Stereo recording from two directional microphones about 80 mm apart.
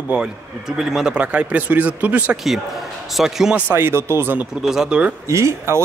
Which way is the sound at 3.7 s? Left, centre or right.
Right.